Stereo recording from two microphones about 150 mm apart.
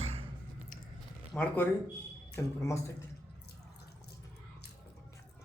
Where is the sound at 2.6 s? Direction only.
20° left (ahead or behind).